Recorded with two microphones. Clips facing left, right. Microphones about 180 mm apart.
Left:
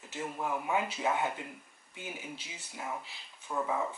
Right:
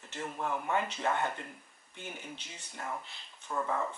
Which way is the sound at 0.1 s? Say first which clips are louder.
Left 1 dB; 5° left (ahead or behind).